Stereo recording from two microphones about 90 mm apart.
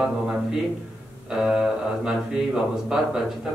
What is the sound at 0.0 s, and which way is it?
A man's voice, 5° right (ahead or behind).